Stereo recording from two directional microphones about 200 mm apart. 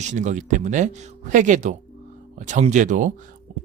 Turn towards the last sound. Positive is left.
turn(degrees=-40)  # may be behind; listen again after turning